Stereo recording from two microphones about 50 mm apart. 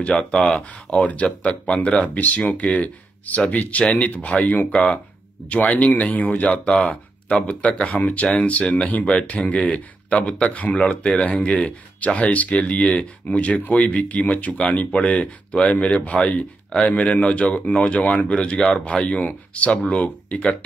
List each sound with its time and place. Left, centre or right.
0.0 s speech: left